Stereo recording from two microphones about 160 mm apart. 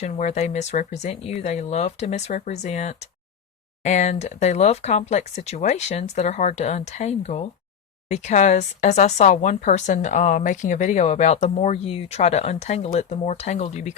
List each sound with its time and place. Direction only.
0.0 s speech: 45° left (ahead or behind)